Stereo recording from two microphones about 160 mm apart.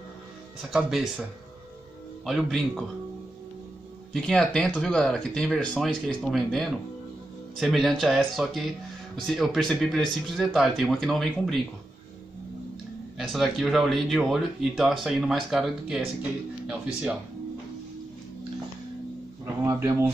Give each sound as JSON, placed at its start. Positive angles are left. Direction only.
{"t": 0.7, "sound": "speech", "side_deg": -5}
{"t": 2.2, "sound": "speech", "side_deg": 0}
{"t": 4.1, "sound": "speech", "side_deg": 5}
{"t": 13.3, "sound": "speech", "side_deg": 0}
{"t": 19.4, "sound": "a sound", "side_deg": -15}